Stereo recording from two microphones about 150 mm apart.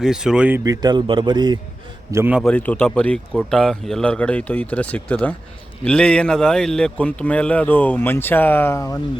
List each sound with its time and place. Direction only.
0.0 s speech: 5° right (ahead or behind)
0.6 s a man's voice: 25° right (ahead or behind)
2.1 s a man's voice: 10° right (ahead or behind)
2.4 s speech: 10° left (ahead or behind)